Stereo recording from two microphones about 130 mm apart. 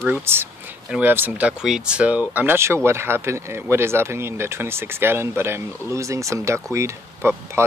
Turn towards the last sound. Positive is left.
turn(degrees=-20)  # may be behind; listen again after turning